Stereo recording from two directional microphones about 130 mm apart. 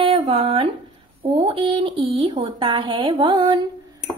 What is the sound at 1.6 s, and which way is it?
A woman's voice, 40° right (ahead or behind).